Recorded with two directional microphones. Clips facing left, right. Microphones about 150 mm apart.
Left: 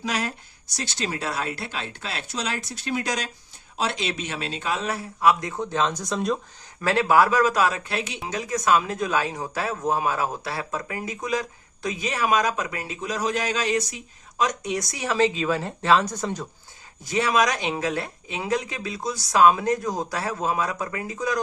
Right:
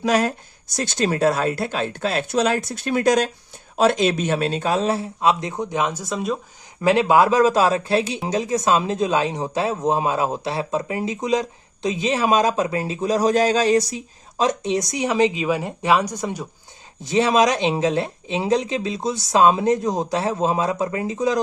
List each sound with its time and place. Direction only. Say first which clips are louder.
0.0 s a man's voice: right 9 dB; 45° right (ahead or behind); by 6.4 s 5° right (ahead or behind)
6.8 s a man's voice: right 4 dB; 20° right (ahead or behind)
17.0 s a man's voice: right 5 dB; 25° right (ahead or behind)